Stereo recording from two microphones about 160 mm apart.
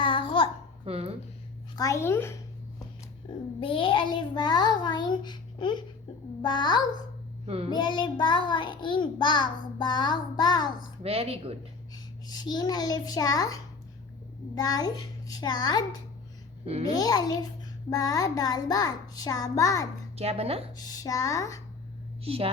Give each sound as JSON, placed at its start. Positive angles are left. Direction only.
{"t": 0.0, "sound": "babbling", "side_deg": 30}
{"t": 0.9, "sound": "speech", "side_deg": -40}
{"t": 1.7, "sound": "a child's voice", "side_deg": 20}
{"t": 3.6, "sound": "a child's voice", "side_deg": 35}
{"t": 7.4, "sound": "a child's voice", "side_deg": -40}
{"t": 7.7, "sound": "a child's voice", "side_deg": 30}
{"t": 11.0, "sound": "speech", "side_deg": -40}
{"t": 12.3, "sound": "a child's voice", "side_deg": 25}
{"t": 17.0, "sound": "a child's voice", "side_deg": 25}
{"t": 20.1, "sound": "speech", "side_deg": -40}
{"t": 20.7, "sound": "a child's voice", "side_deg": 25}
{"t": 22.2, "sound": "a woman's voice", "side_deg": -35}